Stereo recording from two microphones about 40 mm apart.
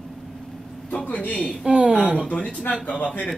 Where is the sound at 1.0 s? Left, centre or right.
Left.